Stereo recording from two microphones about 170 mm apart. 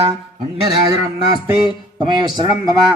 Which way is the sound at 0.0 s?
30° right (ahead or behind).